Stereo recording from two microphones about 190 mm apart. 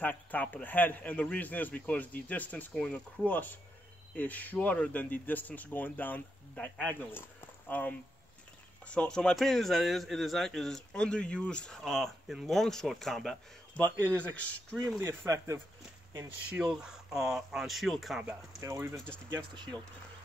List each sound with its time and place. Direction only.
0.0 s a man's voice: 10° left (ahead or behind)
15.0 s a man's voice: 15° right (ahead or behind)
18.6 s speech: 15° right (ahead or behind)